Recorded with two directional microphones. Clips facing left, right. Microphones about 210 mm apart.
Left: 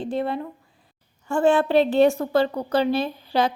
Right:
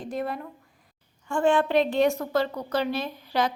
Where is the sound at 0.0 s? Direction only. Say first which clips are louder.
Left 5 dB; 30° left (ahead or behind).